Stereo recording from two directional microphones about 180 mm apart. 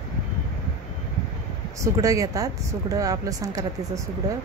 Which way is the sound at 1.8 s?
20° right (ahead or behind).